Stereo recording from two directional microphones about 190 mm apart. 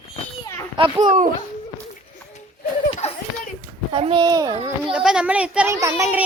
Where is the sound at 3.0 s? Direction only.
35° left (ahead or behind).